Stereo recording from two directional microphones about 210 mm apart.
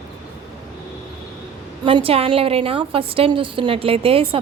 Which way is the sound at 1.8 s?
25° right (ahead or behind).